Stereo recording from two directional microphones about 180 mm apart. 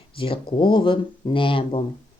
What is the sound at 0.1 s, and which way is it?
Speech, 30° left (ahead or behind).